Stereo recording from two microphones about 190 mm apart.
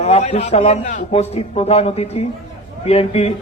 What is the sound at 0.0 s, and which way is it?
A man's voice, 35° left (ahead or behind).